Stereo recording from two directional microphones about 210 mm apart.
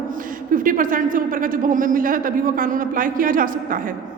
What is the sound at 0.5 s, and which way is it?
Speech, 40° right (ahead or behind).